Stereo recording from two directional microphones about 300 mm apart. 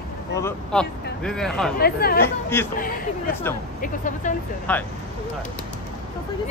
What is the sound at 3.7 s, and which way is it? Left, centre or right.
Speech, left.